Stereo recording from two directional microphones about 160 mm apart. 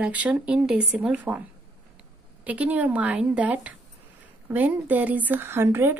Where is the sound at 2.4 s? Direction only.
10° right (ahead or behind).